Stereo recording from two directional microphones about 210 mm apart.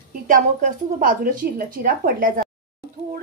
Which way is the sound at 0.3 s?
35° right (ahead or behind).